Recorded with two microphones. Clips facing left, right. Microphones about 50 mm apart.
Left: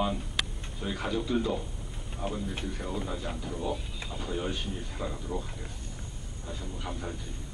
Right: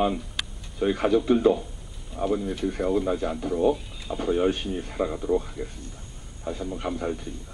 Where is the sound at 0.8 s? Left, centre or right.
Right.